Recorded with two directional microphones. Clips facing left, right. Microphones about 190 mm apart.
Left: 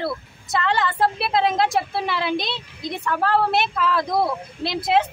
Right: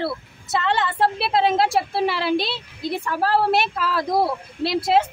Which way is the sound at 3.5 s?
5° right (ahead or behind).